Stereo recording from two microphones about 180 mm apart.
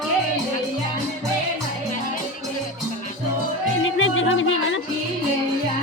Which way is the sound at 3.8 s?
90° left.